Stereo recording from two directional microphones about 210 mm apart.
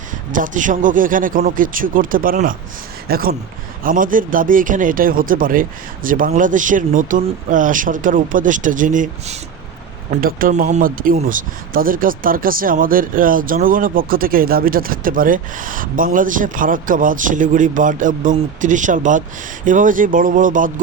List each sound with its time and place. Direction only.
0.3 s speech: 40° right (ahead or behind)